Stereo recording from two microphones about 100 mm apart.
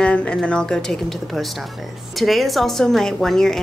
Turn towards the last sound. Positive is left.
turn(degrees=5)  # may be behind; listen again after turning